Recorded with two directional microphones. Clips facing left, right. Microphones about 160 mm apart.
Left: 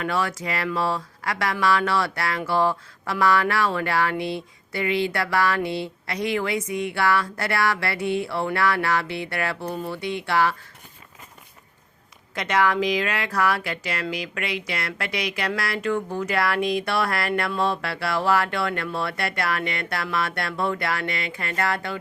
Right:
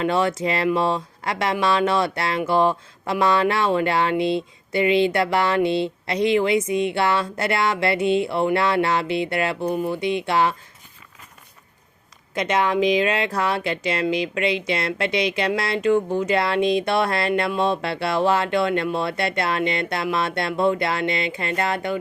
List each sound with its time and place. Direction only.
0.0 s speech: 25° right (ahead or behind)
12.3 s speech: 20° right (ahead or behind)